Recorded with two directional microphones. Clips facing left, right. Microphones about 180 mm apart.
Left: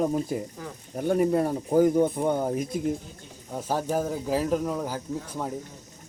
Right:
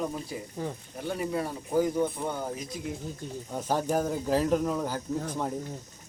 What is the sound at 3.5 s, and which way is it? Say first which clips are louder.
Speech: left 1 dB; 5° left (ahead or behind).